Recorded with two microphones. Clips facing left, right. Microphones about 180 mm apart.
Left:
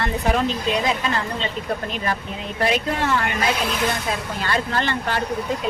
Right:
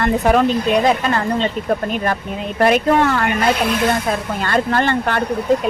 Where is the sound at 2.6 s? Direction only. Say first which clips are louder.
Right 8 dB; 55° right (ahead or behind).